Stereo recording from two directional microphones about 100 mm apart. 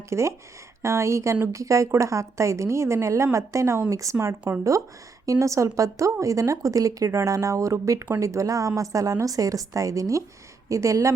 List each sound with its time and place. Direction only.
0.1 s speech: 30° right (ahead or behind)